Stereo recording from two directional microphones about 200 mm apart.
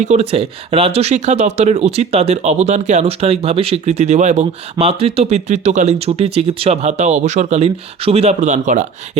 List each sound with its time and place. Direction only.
0.0 s speech: 35° right (ahead or behind)